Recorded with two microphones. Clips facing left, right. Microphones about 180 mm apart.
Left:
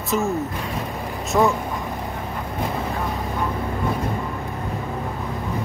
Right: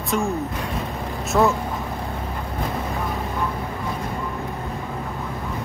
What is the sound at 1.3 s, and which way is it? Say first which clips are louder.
Speech: even; 5° left (ahead or behind).